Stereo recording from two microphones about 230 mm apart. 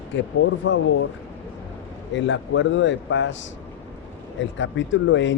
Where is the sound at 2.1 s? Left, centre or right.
Left.